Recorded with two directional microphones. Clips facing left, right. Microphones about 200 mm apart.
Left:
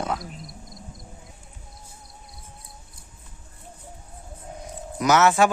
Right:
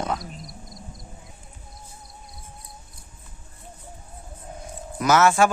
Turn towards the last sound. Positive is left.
turn(degrees=20)  # may be behind; listen again after turning